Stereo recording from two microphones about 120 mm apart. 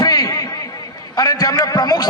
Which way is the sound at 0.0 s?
35° left (ahead or behind).